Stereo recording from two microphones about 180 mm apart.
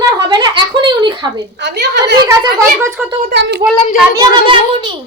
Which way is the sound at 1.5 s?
70° right (ahead or behind).